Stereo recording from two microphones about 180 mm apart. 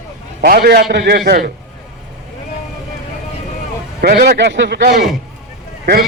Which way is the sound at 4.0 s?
60° right (ahead or behind).